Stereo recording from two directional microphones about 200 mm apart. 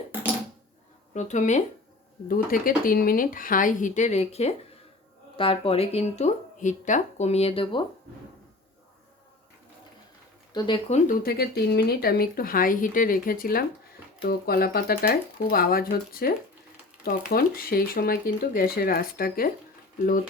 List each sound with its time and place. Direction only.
1.1 s speech: 35° left (ahead or behind)
10.5 s speech: 30° left (ahead or behind)
11.2 s speech: 50° left (ahead or behind)